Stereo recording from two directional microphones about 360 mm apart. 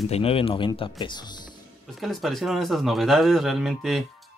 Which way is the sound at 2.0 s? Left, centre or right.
Centre.